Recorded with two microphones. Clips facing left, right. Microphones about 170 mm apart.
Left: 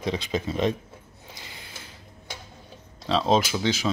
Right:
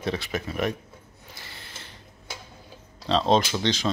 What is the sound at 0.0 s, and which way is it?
Speech, 20° left (ahead or behind).